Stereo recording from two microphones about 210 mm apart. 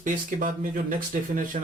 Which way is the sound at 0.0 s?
40° right (ahead or behind).